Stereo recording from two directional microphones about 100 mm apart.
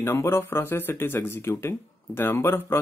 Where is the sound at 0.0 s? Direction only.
25° left (ahead or behind).